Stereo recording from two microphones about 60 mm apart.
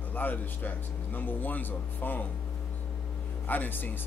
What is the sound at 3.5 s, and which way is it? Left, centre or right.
Speech, left.